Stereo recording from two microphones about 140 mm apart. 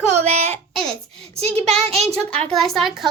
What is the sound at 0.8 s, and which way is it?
Speech, 5° left (ahead or behind).